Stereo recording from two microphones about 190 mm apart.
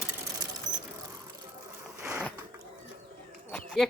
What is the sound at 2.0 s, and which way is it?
Mechanisms, 15° right (ahead or behind).